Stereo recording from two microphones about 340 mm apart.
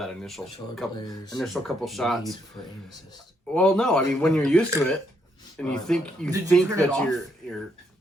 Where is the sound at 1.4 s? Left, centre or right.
Centre.